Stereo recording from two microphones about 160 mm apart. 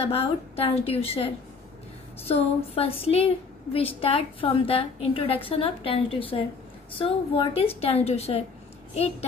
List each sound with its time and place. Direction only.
0.0 s a woman's voice: 35° left (ahead or behind)
2.7 s a woman's voice: 35° left (ahead or behind)